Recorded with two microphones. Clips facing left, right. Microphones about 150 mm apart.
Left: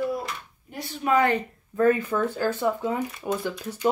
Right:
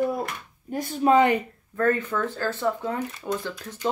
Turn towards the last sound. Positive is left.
turn(degrees=10)  # may be behind; listen again after turning